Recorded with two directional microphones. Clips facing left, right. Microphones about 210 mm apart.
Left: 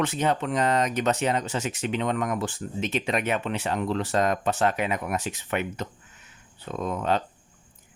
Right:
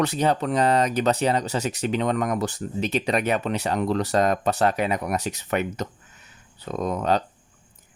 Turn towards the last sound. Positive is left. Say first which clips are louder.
# right 3 dB
turn(degrees=-40)  # may be behind; listen again after turning